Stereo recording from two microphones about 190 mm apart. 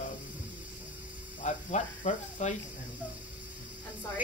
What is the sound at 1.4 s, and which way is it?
Speech, 40° left (ahead or behind).